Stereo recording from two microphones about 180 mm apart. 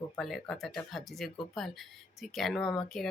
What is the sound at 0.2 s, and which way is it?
Speech, centre (ahead or behind).